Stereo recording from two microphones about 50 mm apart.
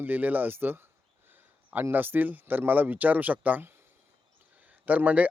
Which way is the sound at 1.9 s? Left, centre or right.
Right.